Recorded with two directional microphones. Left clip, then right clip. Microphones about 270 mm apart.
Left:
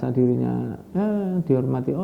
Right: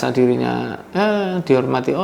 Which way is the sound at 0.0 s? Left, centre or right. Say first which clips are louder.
Right 6 dB; centre.